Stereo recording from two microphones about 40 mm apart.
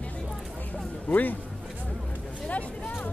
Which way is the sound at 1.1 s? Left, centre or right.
Left.